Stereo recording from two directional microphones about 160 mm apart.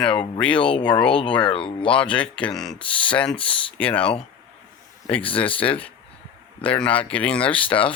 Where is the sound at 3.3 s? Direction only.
35° left (ahead or behind).